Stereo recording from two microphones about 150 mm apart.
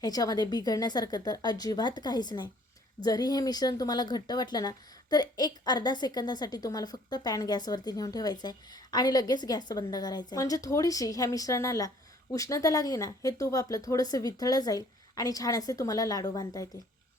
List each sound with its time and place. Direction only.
0.0 s speech: 25° left (ahead or behind)